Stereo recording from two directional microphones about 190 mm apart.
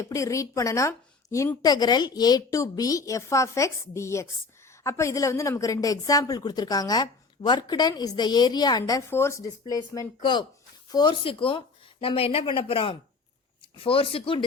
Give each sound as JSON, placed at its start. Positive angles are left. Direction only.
{"t": 0.0, "sound": "a woman's voice", "side_deg": 15}